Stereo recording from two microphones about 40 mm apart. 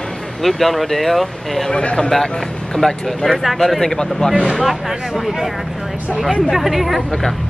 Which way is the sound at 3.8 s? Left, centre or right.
Centre.